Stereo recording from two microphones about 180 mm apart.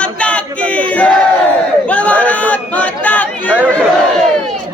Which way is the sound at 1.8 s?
10° left (ahead or behind).